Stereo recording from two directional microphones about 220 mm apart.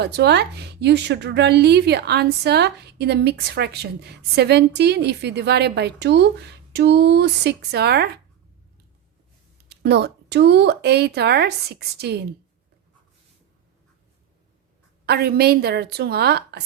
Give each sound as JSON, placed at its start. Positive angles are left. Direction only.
{"t": 0.0, "sound": "a woman's voice", "side_deg": -50}
{"t": 9.6, "sound": "a woman's voice", "side_deg": -50}
{"t": 15.0, "sound": "a woman's voice", "side_deg": -45}